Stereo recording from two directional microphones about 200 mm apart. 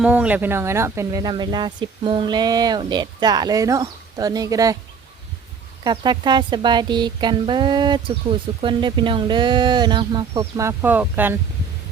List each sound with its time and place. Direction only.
0.0 s speech: 5° right (ahead or behind)
5.8 s speech: 20° right (ahead or behind)